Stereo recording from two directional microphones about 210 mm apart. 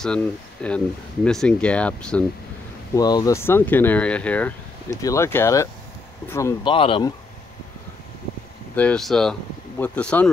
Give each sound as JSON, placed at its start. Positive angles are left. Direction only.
{"t": 0.0, "sound": "speech", "side_deg": 5}
{"t": 3.0, "sound": "speech", "side_deg": 20}
{"t": 8.7, "sound": "speech", "side_deg": 5}